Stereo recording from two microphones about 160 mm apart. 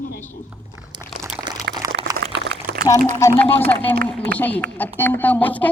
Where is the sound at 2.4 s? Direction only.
75° right (ahead or behind).